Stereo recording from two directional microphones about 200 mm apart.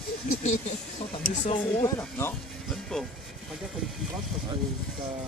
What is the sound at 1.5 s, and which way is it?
Speech, 15° left (ahead or behind).